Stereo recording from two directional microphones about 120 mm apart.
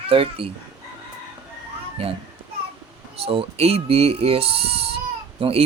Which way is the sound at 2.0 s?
55° right (ahead or behind).